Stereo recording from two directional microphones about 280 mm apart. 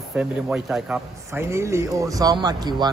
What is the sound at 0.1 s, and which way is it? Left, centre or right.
A man's voice, centre.